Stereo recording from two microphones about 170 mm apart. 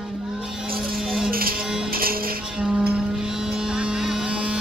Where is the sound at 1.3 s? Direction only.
60° right (ahead or behind).